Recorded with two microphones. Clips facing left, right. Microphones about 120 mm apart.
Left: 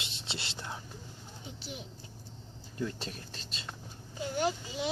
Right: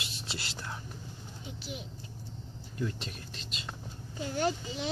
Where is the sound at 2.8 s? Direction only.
35° left (ahead or behind).